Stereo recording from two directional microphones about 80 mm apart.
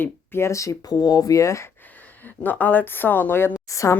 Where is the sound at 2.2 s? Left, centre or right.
Left.